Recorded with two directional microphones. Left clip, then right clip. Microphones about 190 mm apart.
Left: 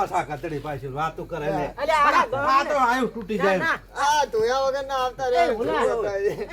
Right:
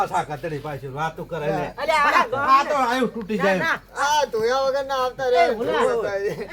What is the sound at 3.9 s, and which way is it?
Speech, centre (ahead or behind).